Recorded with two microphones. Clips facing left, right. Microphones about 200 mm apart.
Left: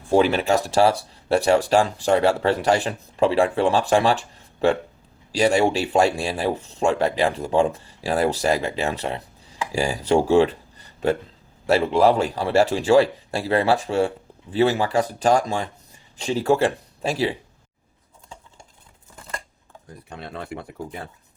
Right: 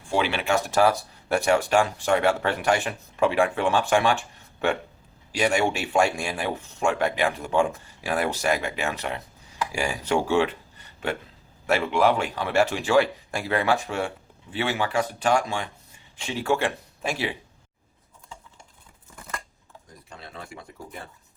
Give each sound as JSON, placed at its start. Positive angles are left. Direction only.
{"t": 0.1, "sound": "speech", "side_deg": 40}
{"t": 20.1, "sound": "speech", "side_deg": 60}